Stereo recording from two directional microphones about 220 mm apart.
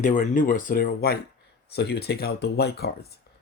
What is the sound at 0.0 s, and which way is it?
Speech, 35° left (ahead or behind).